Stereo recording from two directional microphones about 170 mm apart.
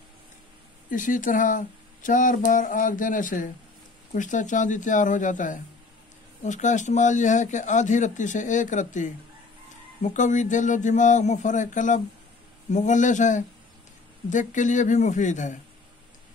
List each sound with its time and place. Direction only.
0.8 s speech: 50° left (ahead or behind)